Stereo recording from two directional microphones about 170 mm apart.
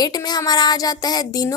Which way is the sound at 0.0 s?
25° left (ahead or behind).